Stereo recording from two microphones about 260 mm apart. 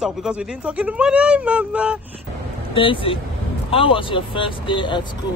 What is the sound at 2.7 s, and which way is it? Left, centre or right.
Speech, centre.